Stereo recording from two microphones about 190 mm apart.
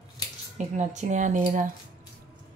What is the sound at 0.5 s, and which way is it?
Speech, 40° right (ahead or behind).